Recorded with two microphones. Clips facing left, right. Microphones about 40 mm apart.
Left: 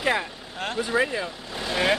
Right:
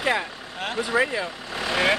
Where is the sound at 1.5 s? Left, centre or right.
Right.